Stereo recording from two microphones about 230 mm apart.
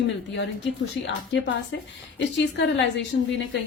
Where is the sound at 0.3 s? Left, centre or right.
Left.